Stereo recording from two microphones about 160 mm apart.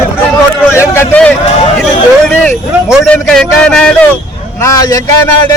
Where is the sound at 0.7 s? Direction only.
15° left (ahead or behind).